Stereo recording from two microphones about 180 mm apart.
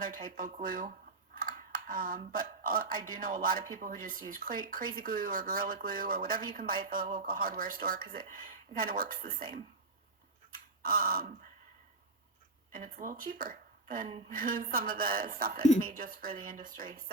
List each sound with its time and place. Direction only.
0.0 s speech: 50° right (ahead or behind)
10.8 s speech: 55° right (ahead or behind)
12.7 s speech: 45° right (ahead or behind)